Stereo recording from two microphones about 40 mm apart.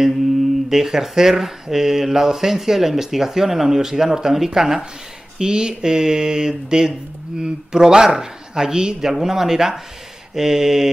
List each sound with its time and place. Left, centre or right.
0.7 s speech: centre
5.4 s speech: centre